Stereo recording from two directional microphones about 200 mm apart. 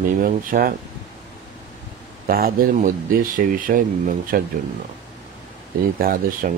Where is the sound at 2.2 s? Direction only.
45° right (ahead or behind).